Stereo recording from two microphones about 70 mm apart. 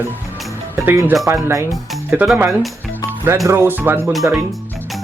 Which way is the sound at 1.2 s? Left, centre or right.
Right.